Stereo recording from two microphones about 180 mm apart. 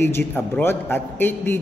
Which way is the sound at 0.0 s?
10° left (ahead or behind).